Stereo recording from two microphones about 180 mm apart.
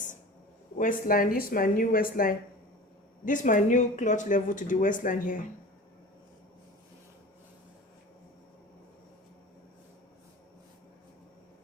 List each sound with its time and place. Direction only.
0.8 s speech: 50° left (ahead or behind)